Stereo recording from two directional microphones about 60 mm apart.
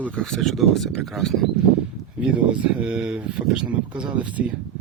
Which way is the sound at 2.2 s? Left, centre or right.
Centre.